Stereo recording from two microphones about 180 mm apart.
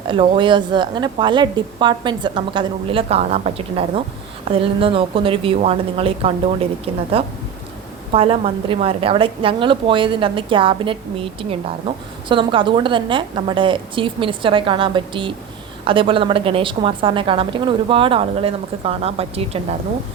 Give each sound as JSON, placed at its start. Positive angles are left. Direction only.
{"t": 0.1, "sound": "a woman's voice", "side_deg": -25}
{"t": 12.3, "sound": "a woman's voice", "side_deg": -30}